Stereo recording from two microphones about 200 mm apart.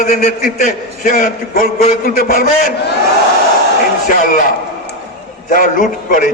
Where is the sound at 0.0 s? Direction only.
45° left (ahead or behind).